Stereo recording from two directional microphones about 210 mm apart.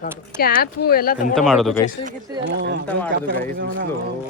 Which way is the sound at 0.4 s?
45° left (ahead or behind).